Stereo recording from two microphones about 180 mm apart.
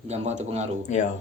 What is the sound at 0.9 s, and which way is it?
Speech, 40° left (ahead or behind).